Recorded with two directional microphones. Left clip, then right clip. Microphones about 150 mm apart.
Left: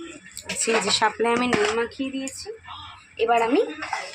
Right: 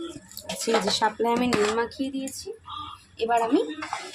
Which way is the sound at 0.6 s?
5° right (ahead or behind).